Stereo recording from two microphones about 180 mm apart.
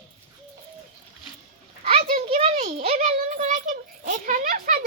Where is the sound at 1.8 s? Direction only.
35° right (ahead or behind).